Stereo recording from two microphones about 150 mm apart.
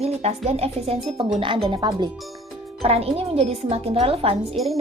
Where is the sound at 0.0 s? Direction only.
45° right (ahead or behind).